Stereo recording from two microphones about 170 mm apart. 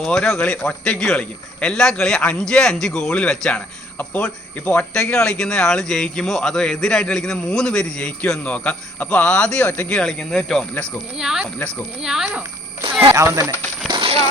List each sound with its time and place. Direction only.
0.0 s speech: 5° left (ahead or behind)
13.1 s speech: 15° right (ahead or behind)
13.8 s music: 30° right (ahead or behind)